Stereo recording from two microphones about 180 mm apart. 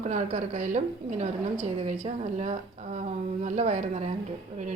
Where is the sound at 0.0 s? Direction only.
40° right (ahead or behind).